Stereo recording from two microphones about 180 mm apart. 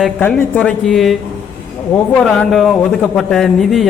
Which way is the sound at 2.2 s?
5° left (ahead or behind).